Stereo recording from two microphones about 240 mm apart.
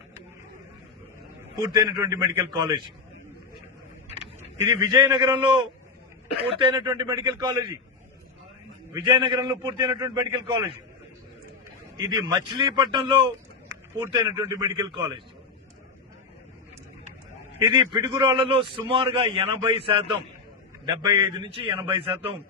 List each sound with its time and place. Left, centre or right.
1.5 s a man's voice: centre
4.6 s a man's voice: centre
8.9 s a man's voice: centre
11.9 s a man's voice: centre
17.7 s a man's voice: centre
19.8 s a man's voice: right